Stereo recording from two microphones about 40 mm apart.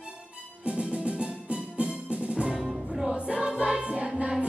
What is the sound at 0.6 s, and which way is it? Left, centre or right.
Music, right.